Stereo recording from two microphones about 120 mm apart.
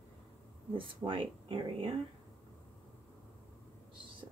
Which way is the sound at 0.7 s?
45° right (ahead or behind).